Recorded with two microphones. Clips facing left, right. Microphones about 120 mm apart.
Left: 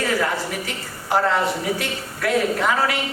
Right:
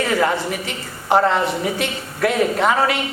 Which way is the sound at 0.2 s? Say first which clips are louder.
Right 4 dB; 25° right (ahead or behind).